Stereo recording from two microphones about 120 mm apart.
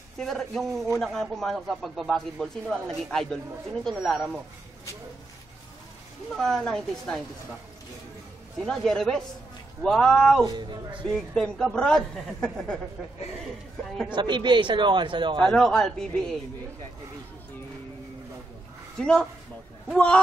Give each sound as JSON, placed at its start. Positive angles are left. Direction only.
{"t": 0.2, "sound": "speech", "side_deg": 0}
{"t": 6.3, "sound": "speech", "side_deg": 5}
{"t": 8.6, "sound": "speech", "side_deg": 5}
{"t": 10.4, "sound": "a man's voice", "side_deg": -35}
{"t": 11.1, "sound": "speech", "side_deg": 5}
{"t": 14.1, "sound": "a man's voice", "side_deg": -40}
{"t": 15.5, "sound": "speech", "side_deg": 5}
{"t": 18.9, "sound": "speech", "side_deg": 5}